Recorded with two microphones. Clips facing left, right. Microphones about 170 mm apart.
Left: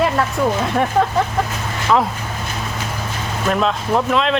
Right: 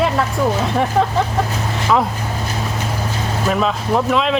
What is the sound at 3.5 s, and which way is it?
Speech, centre (ahead or behind).